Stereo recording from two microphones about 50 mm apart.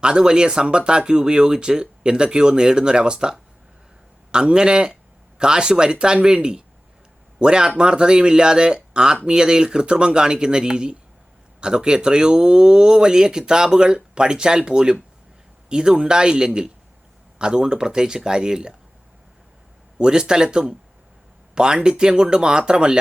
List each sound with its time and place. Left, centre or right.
0.0 s speech: centre
20.0 s speech: centre